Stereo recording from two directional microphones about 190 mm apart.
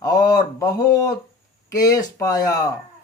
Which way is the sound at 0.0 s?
20° left (ahead or behind).